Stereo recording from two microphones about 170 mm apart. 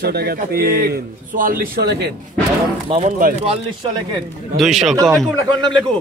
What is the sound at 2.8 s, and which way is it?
Speech, 40° right (ahead or behind).